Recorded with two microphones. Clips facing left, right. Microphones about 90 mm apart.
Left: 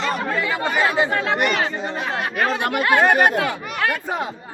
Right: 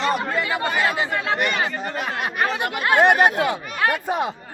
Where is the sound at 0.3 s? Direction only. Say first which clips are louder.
Left 1 dB; centre (ahead or behind).